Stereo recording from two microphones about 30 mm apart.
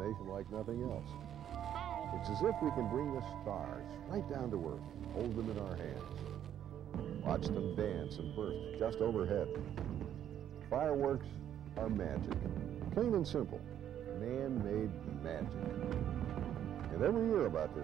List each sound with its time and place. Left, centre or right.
0.0 s speech: centre